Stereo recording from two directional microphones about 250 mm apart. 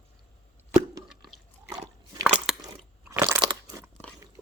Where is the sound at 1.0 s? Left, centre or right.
Centre.